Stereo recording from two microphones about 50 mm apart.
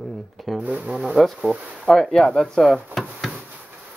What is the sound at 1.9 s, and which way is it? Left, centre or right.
Speech, centre.